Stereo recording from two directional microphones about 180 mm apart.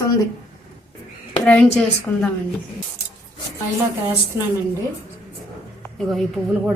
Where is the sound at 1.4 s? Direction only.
5° left (ahead or behind).